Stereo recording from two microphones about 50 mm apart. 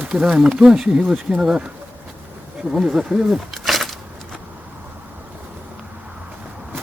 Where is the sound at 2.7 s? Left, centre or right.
Centre.